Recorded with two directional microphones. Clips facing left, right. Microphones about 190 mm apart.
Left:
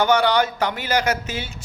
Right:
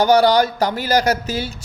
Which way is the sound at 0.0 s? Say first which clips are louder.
Right 4 dB; 35° right (ahead or behind).